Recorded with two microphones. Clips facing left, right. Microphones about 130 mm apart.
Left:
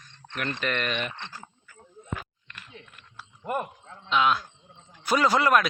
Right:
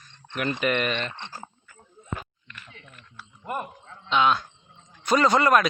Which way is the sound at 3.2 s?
10° left (ahead or behind).